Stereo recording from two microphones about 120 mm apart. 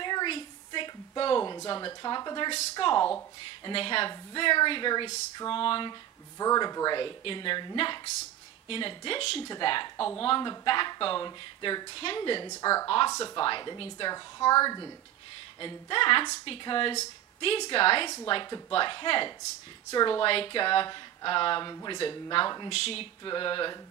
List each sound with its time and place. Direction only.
0.0 s a sound: 40° left (ahead or behind)
1.7 s speech: 35° left (ahead or behind)
6.3 s speech: 30° left (ahead or behind)
12.4 s a woman's voice: 25° left (ahead or behind)
12.8 s speech: 50° left (ahead or behind)
13.1 s a woman's voice: 30° left (ahead or behind)
13.4 s speech: 40° left (ahead or behind)
15.6 s speech: 45° left (ahead or behind)
22.7 s speech: 55° left (ahead or behind)
23.2 s speech: 40° left (ahead or behind)